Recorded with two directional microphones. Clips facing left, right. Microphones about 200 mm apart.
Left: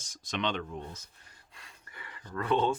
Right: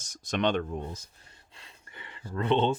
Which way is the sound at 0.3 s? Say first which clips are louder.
Right 6 dB; 45° right (ahead or behind).